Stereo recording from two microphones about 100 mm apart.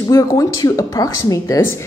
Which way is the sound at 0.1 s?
35° left (ahead or behind).